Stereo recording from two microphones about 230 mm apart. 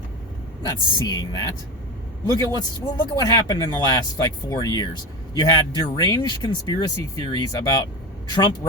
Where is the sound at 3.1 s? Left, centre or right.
Centre.